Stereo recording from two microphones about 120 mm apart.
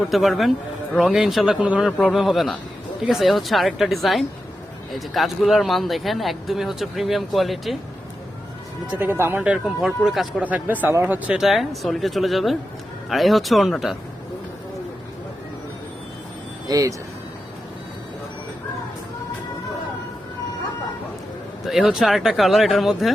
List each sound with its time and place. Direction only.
0.1 s speech: centre (ahead or behind)
2.0 s speech: centre (ahead or behind)
8.9 s speech: 20° right (ahead or behind); by 10.4 s 5° right (ahead or behind)
10.4 s speech: 15° right (ahead or behind)
16.6 s speech: 30° right (ahead or behind)
21.7 s speech: 5° right (ahead or behind)